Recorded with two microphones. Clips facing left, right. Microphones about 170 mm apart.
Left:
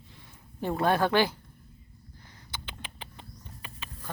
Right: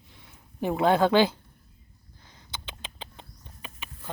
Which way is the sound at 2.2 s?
15° right (ahead or behind).